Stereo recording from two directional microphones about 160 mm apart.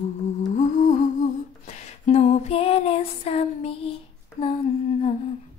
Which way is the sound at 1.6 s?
45° left (ahead or behind).